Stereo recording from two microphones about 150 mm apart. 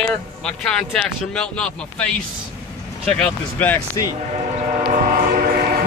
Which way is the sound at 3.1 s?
10° left (ahead or behind).